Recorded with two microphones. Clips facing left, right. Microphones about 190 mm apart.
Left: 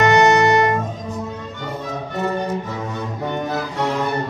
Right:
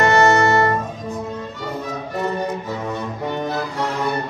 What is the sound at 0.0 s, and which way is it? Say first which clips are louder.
Music: left 1 dB; 20° left (ahead or behind).